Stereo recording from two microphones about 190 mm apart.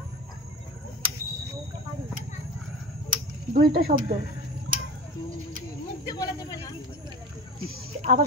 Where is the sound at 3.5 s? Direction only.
55° right (ahead or behind).